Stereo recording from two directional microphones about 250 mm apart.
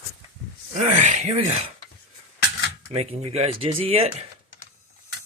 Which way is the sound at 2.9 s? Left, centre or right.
Right.